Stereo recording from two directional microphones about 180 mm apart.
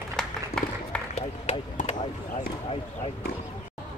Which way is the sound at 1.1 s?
40° left (ahead or behind).